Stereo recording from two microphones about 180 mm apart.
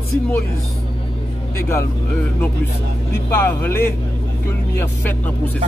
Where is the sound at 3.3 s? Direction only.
10° left (ahead or behind).